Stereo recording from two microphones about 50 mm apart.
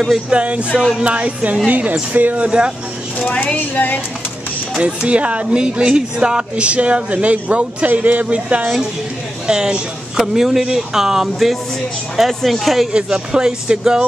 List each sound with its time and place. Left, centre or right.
0.3 s speech: right
2.4 s speech: centre
3.2 s speech: left
4.8 s speech: right; by 12.8 s centre
12.9 s speech: centre